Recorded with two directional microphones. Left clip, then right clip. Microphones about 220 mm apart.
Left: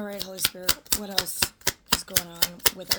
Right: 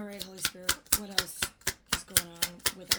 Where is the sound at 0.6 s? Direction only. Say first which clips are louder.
Left 4 dB; 30° left (ahead or behind).